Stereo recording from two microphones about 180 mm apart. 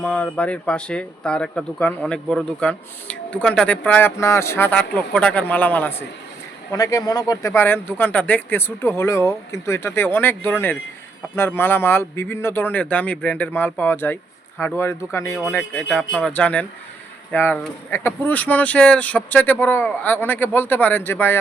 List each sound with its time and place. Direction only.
0.0 s speech: 5° left (ahead or behind)